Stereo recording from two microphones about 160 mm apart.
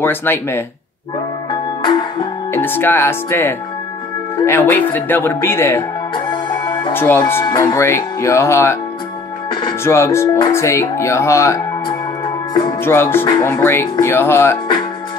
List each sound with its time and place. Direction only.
0.0 s speech: 15° left (ahead or behind)
1.5 s music: 30° left (ahead or behind)
2.5 s speech: 15° left (ahead or behind)
6.1 s music: 30° left (ahead or behind)
6.9 s speech: 15° left (ahead or behind)
9.8 s speech: 15° left (ahead or behind)
12.8 s speech: 15° left (ahead or behind)